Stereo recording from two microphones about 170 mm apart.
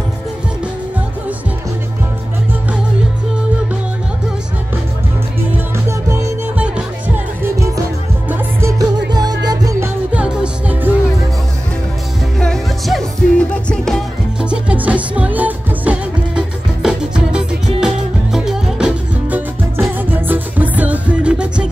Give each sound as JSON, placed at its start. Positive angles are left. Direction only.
{"t": 5.9, "sound": "music", "side_deg": -15}
{"t": 8.3, "sound": "music", "side_deg": -15}
{"t": 10.1, "sound": "music", "side_deg": -5}
{"t": 12.4, "sound": "music", "side_deg": 0}